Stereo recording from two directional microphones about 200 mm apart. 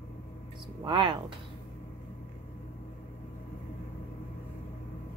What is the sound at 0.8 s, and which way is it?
Speech, 25° right (ahead or behind).